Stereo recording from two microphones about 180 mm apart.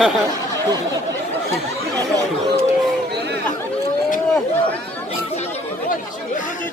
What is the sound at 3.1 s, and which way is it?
Chatter, 65° right (ahead or behind).